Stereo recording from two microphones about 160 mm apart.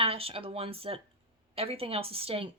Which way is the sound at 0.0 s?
35° right (ahead or behind).